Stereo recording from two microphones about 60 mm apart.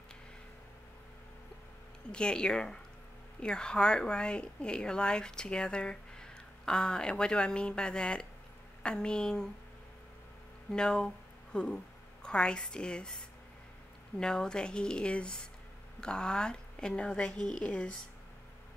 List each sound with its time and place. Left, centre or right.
2.0 s a woman's voice: centre
10.7 s a woman's voice: centre